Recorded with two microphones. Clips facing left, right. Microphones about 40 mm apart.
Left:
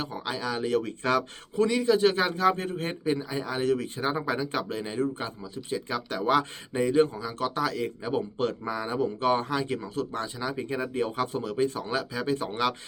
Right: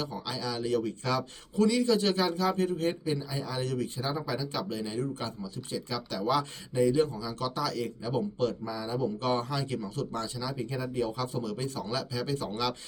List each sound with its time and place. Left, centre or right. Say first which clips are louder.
0.0 s a man's voice: left 3 dB; left
1.5 s a man's voice: left 2 dB; left
8.7 s speech: left 4 dB; left
9.1 s a man's voice: left 4 dB; left